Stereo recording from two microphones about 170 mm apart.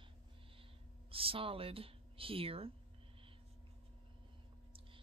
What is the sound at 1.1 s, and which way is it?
Speech, 35° right (ahead or behind).